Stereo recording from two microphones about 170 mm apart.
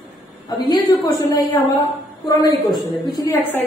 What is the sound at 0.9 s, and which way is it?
Speech, 20° left (ahead or behind).